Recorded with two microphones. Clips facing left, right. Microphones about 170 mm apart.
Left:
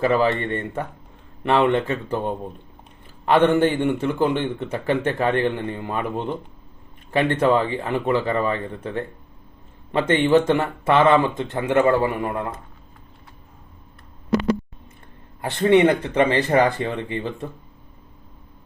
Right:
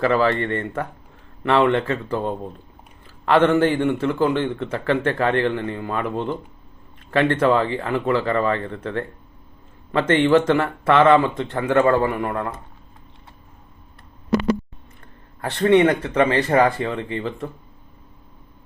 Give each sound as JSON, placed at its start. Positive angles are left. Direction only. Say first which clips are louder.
{"t": 0.0, "sound": "a man's voice", "louder": "right 1 dB", "side_deg": 20}
{"t": 15.4, "sound": "speech", "louder": "even", "side_deg": 20}
{"t": 16.5, "sound": "speech", "louder": "right 1 dB", "side_deg": 30}